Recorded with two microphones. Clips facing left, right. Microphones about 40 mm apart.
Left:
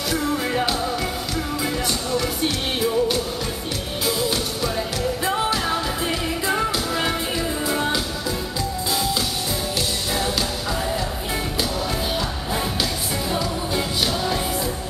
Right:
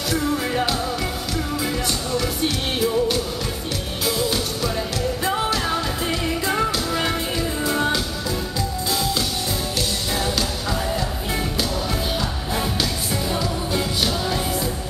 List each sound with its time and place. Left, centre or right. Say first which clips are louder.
0.1 s music: right 1 dB; centre
2.1 s music: even; centre
13.3 s music: left 1 dB; centre